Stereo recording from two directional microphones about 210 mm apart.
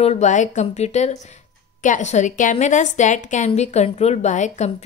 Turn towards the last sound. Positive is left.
turn(degrees=35)  # may be behind; listen again after turning